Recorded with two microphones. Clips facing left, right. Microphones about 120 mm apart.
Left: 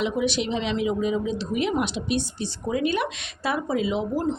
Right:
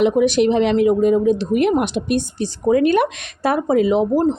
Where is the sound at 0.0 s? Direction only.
50° right (ahead or behind).